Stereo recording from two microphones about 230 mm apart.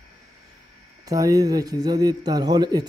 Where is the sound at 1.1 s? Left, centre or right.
Centre.